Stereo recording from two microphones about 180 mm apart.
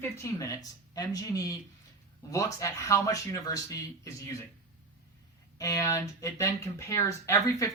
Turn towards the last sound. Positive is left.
turn(degrees=20)  # may be behind; listen again after turning